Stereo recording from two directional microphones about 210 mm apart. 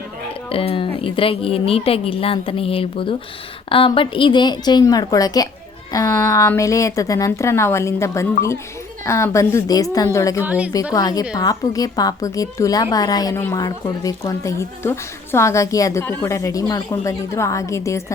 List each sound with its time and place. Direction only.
0.5 s a woman's voice: 25° left (ahead or behind)
10.4 s a woman's voice: 5° right (ahead or behind)
10.9 s a woman's voice: 15° left (ahead or behind)